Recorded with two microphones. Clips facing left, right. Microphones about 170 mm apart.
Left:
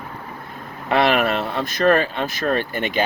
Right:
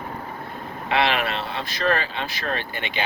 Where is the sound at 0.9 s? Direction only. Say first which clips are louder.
Left 5 dB; 45° left (ahead or behind).